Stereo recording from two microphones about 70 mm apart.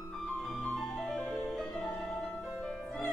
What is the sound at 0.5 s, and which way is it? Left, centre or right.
Music, centre.